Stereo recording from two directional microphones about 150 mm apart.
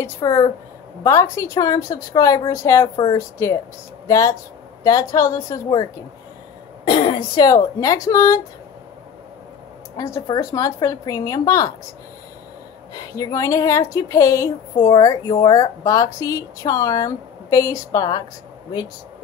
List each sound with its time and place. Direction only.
0.0 s speech: 15° left (ahead or behind)
6.8 s speech: 35° left (ahead or behind)
9.9 s speech: 25° left (ahead or behind)
12.9 s speech: 25° left (ahead or behind)